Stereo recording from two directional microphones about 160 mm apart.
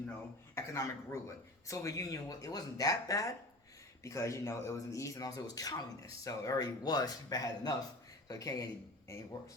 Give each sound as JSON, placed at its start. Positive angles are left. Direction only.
{"t": 0.1, "sound": "speech", "side_deg": 15}